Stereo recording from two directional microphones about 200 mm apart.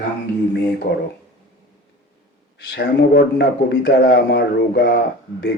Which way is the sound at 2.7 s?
50° left (ahead or behind).